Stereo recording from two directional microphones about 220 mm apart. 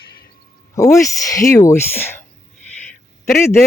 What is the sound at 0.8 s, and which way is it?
A man's voice, 15° left (ahead or behind).